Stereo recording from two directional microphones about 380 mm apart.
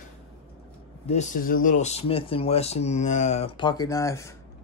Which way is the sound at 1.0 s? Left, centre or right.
Centre.